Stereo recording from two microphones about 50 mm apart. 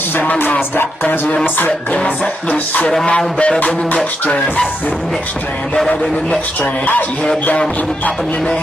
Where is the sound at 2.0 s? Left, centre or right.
Left.